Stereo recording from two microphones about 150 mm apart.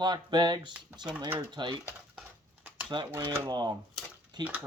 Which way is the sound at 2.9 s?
30° right (ahead or behind).